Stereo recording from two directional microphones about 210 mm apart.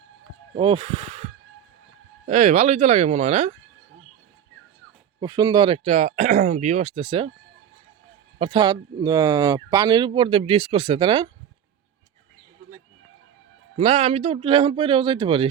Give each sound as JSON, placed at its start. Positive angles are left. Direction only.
{"t": 0.5, "sound": "speech", "side_deg": -25}
{"t": 5.2, "sound": "speech", "side_deg": -20}
{"t": 8.4, "sound": "speech", "side_deg": -25}
{"t": 13.7, "sound": "speech", "side_deg": -30}